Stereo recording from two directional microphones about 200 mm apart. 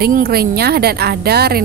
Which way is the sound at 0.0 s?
50° right (ahead or behind).